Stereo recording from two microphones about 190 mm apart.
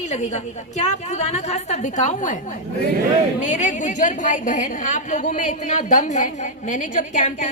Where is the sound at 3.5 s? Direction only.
40° left (ahead or behind).